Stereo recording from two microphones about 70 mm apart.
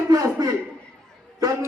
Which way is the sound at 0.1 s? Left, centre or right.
Right.